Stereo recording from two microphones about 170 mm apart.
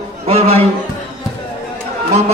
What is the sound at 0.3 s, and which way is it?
Speech, 35° right (ahead or behind).